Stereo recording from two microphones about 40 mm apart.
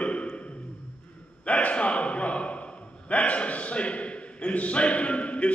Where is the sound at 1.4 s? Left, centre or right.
Left.